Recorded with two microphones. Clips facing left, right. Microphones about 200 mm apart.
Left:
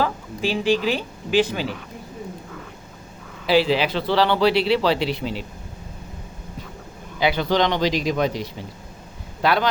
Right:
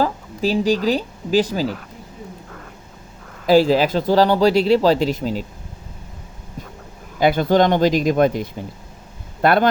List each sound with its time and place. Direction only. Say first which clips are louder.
0.0 s speech: right 3 dB; 40° right (ahead or behind)
3.4 s speech: right 5 dB; 45° right (ahead or behind)
7.2 s speech: right 5 dB; 50° right (ahead or behind)